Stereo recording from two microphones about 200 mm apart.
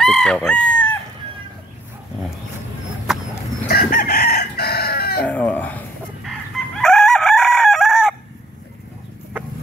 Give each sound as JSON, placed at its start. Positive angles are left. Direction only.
{"t": 0.0, "sound": "chicken", "side_deg": 0}
{"t": 3.1, "sound": "a sound", "side_deg": 0}
{"t": 3.6, "sound": "chicken", "side_deg": 45}
{"t": 5.2, "sound": "chicken", "side_deg": 5}